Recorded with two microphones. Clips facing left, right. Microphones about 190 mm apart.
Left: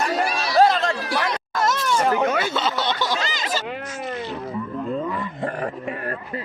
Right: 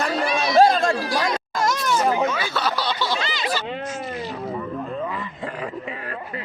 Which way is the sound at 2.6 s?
25° left (ahead or behind).